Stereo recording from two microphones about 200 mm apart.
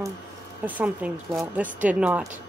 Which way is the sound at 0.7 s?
10° right (ahead or behind).